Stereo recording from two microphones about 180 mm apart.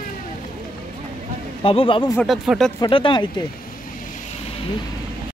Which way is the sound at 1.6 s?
30° left (ahead or behind).